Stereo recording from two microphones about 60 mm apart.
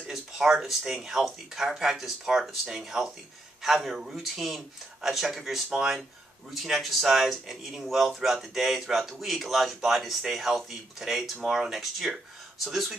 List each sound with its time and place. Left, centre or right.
0.0 s speech: centre